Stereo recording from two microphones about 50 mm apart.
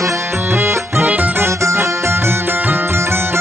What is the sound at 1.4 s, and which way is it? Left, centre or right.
Music, right.